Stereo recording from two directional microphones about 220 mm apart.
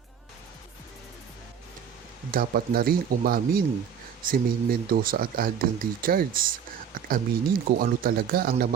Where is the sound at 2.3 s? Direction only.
40° right (ahead or behind).